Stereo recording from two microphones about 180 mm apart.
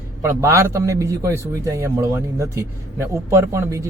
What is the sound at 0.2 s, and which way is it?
A man's voice, 15° right (ahead or behind).